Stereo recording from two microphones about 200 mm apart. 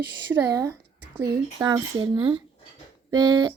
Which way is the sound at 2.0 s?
25° right (ahead or behind).